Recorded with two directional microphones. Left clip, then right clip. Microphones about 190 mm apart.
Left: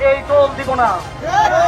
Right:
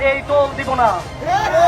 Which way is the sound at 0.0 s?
60° right (ahead or behind).